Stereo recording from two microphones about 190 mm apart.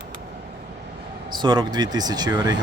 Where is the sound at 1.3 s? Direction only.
25° right (ahead or behind).